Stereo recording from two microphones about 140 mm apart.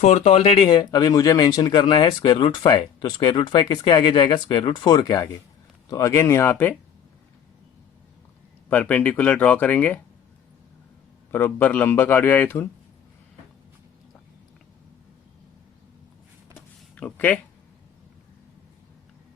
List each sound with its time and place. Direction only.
0.0 s speech: 50° left (ahead or behind); by 6.7 s 15° left (ahead or behind)
8.7 s speech: 10° left (ahead or behind)
11.3 s speech: 15° left (ahead or behind)
16.6 s a sound: 10° left (ahead or behind)